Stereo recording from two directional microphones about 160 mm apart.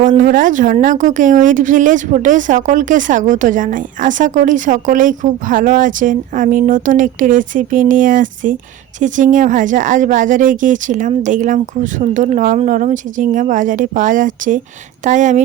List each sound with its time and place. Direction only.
0.2 s a woman's voice: 55° right (ahead or behind)